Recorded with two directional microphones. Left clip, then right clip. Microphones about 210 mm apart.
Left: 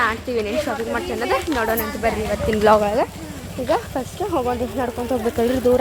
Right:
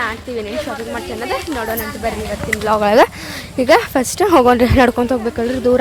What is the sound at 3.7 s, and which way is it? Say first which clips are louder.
Speech: right 9 dB; 55° right (ahead or behind).